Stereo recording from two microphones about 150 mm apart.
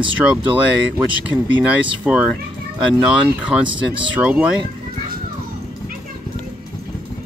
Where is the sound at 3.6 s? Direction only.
35° right (ahead or behind).